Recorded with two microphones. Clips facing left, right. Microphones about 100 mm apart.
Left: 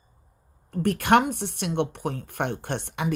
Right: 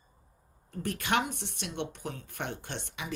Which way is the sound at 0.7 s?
60° left (ahead or behind).